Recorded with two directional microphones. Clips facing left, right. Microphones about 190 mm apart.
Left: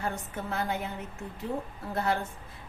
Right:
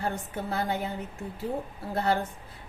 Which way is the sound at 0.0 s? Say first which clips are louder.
Right 2 dB; 35° right (ahead or behind).